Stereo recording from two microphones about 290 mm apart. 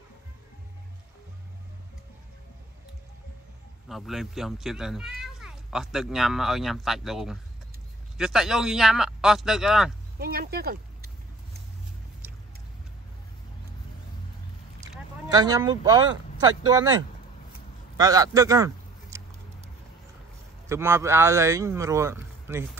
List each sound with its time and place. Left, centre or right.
3.9 s speech: centre
10.1 s speech: right
14.8 s a man's voice: centre
20.6 s a man's voice: centre